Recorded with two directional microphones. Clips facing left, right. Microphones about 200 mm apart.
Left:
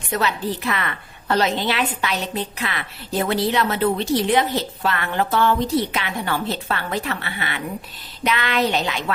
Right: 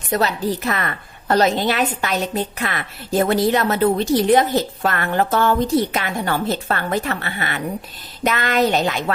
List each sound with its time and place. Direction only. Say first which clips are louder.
0.1 s a woman's voice: right 3 dB; 40° right (ahead or behind)